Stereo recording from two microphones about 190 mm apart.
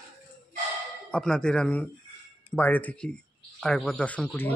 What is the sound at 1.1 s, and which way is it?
Speech, 5° left (ahead or behind).